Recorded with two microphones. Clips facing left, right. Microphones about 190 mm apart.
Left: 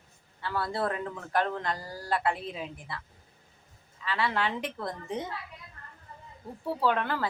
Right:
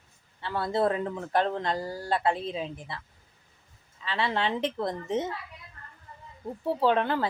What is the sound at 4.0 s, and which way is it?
Speech, 25° right (ahead or behind).